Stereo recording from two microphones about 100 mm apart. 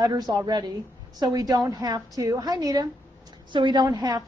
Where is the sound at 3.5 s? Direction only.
50° right (ahead or behind).